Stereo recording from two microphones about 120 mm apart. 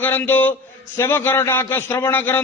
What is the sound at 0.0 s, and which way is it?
A man's voice, 15° left (ahead or behind).